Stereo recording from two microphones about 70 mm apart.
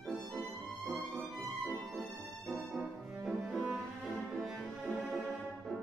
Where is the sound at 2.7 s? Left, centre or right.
Centre.